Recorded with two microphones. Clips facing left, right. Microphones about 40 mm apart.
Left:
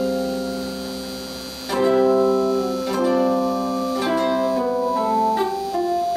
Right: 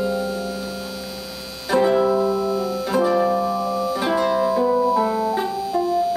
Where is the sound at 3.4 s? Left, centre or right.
Left.